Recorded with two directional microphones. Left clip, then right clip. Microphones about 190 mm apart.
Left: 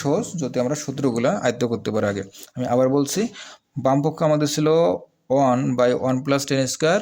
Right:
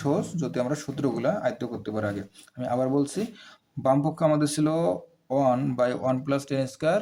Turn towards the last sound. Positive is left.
turn(degrees=30)  # may be behind; listen again after turning